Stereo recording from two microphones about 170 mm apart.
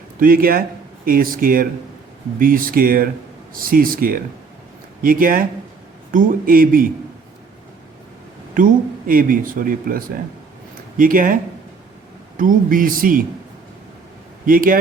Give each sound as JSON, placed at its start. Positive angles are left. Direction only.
{"t": 0.2, "sound": "speech", "side_deg": -60}
{"t": 8.5, "sound": "speech", "side_deg": -55}
{"t": 12.4, "sound": "speech", "side_deg": -55}
{"t": 14.4, "sound": "speech", "side_deg": -55}